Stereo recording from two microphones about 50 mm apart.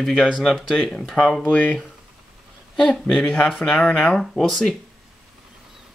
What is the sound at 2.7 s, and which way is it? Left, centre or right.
Speech, centre.